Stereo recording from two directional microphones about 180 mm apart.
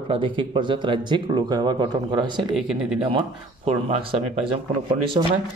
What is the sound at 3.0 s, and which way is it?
Speech, 30° right (ahead or behind).